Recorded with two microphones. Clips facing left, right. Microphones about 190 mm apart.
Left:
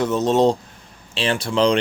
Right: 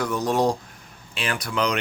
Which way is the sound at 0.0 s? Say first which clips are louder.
Left 5 dB; 25° left (ahead or behind).